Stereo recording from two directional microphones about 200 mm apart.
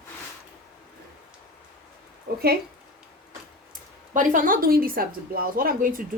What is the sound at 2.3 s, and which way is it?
Speech, 50° right (ahead or behind).